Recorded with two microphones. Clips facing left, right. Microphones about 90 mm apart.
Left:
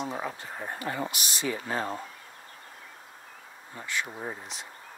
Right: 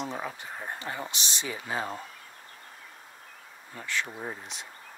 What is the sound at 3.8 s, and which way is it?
Bee, 15° left (ahead or behind).